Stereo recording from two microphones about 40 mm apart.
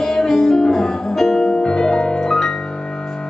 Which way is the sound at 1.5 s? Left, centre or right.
Centre.